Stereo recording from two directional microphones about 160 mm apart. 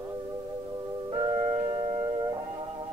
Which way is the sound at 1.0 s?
25° right (ahead or behind).